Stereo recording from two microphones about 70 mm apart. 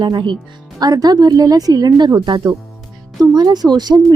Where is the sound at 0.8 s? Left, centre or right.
Right.